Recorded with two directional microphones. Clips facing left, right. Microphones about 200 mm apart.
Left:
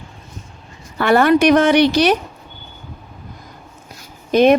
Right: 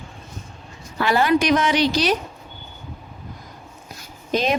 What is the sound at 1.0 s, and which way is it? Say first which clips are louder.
A woman's voice: left 5 dB; 60° left (ahead or behind).